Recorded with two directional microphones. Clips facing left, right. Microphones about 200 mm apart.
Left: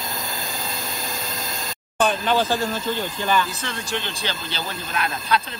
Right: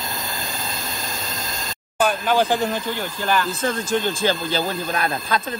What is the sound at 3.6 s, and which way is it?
Speech, 50° right (ahead or behind).